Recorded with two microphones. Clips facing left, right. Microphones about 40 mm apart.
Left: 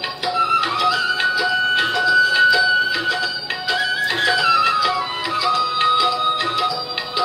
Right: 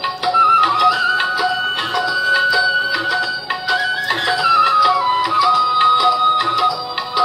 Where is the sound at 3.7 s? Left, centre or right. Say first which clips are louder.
Right 2 dB; right.